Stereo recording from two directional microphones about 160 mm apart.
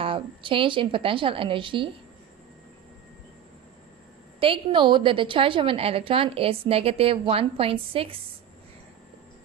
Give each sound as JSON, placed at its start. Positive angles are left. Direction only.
{"t": 0.0, "sound": "a woman's voice", "side_deg": -35}
{"t": 4.4, "sound": "a woman's voice", "side_deg": -35}